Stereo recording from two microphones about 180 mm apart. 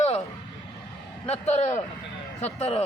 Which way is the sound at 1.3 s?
40° left (ahead or behind).